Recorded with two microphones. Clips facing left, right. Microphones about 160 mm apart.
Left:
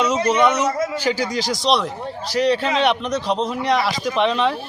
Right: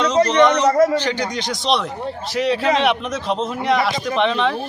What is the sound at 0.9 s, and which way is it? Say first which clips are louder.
Speech: even; 5° left (ahead or behind).